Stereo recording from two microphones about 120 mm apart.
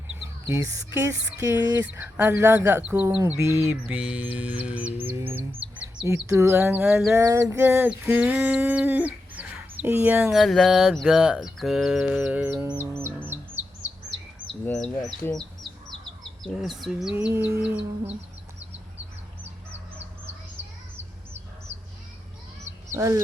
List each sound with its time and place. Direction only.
0.4 s speech: 20° right (ahead or behind)
1.8 s speech: 15° right (ahead or behind)
3.3 s speech: 20° right (ahead or behind)
7.7 s speech: 10° right (ahead or behind)
10.2 s a sound: centre (ahead or behind)
12.2 s speech: 10° right (ahead or behind)
13.3 s bird: 20° right (ahead or behind)
14.7 s speech: 5° left (ahead or behind)
16.4 s a sound: centre (ahead or behind)
17.3 s speech: 20° right (ahead or behind)
23.0 s speech: 25° right (ahead or behind)